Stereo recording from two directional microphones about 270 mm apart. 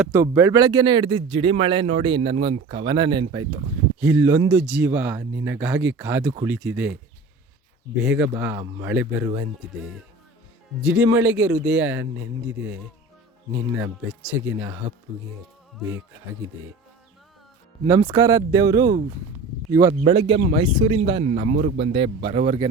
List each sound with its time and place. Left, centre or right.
0.0 s speech: centre
10.8 s speech: centre
12.1 s speech: right
13.7 s speech: centre
17.8 s speech: centre